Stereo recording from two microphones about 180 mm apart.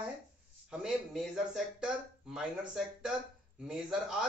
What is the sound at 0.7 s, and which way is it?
Speech, 5° right (ahead or behind).